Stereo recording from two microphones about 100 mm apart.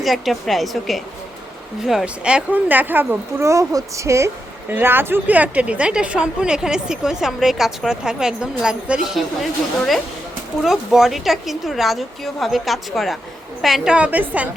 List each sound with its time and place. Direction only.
0.0 s a woman's voice: centre (ahead or behind)